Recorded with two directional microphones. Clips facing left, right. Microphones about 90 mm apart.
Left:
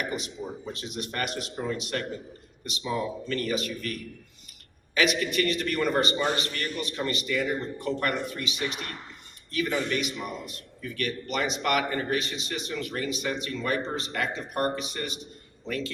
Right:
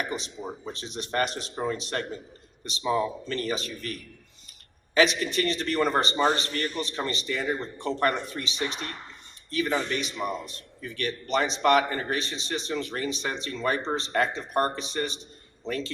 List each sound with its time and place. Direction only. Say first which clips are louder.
0.7 s a man's voice: right 2 dB; 30° right (ahead or behind)